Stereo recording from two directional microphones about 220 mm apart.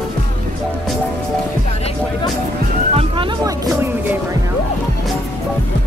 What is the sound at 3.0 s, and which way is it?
Music, 20° right (ahead or behind).